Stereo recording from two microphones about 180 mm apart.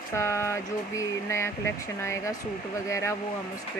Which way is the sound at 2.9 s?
15° left (ahead or behind).